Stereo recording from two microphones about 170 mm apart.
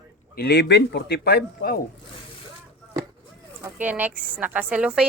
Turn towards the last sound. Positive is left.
turn(degrees=-5)  # may be behind; listen again after turning